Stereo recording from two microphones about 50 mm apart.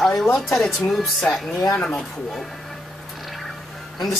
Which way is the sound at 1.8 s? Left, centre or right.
Centre.